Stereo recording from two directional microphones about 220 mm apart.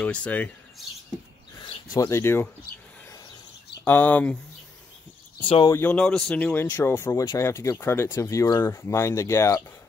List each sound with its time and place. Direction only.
0.0 s speech: 5° left (ahead or behind)
1.6 s speech: 20° left (ahead or behind)
3.8 s speech: 5° left (ahead or behind)
5.4 s speech: 20° left (ahead or behind)
5.8 s speech: 5° left (ahead or behind)